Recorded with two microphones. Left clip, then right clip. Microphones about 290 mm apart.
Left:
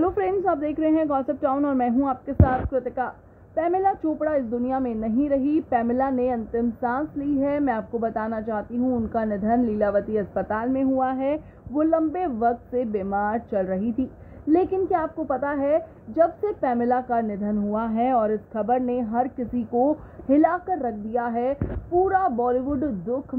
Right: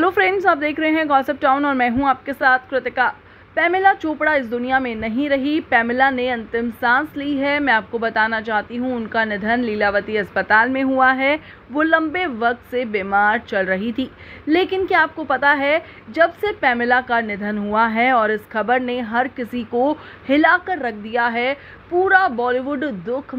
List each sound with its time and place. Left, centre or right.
0.0 s a woman's voice: right